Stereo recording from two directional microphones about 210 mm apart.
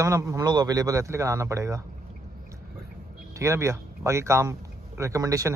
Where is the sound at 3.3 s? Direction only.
15° right (ahead or behind).